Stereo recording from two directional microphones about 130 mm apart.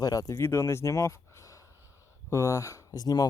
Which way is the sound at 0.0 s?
25° left (ahead or behind).